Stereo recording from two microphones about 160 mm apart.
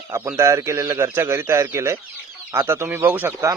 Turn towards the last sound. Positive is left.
turn(degrees=-15)  # may be behind; listen again after turning